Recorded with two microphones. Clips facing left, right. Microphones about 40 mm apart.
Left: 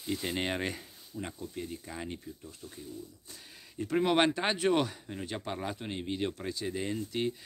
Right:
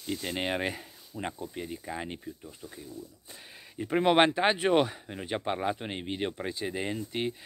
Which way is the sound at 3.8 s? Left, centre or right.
Right.